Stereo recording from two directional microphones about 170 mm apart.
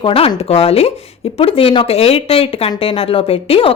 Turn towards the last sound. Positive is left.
turn(degrees=35)  # may be behind; listen again after turning